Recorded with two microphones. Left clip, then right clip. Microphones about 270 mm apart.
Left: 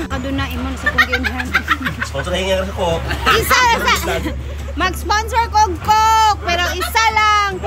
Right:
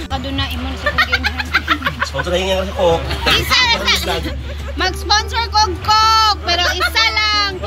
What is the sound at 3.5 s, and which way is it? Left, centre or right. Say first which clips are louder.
Speech: left 1 dB; centre.